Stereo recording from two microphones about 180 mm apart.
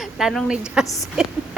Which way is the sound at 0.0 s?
Centre (ahead or behind).